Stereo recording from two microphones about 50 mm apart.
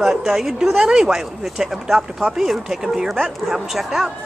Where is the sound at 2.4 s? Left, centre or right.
Centre.